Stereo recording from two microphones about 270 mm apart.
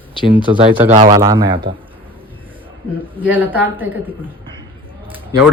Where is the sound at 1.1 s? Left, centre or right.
Centre.